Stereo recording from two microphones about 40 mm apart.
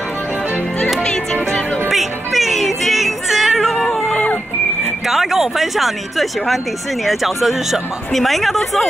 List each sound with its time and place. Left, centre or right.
1.0 s music: centre
1.9 s music: centre
3.8 s cat: centre
4.1 s music: left
5.0 s speech: centre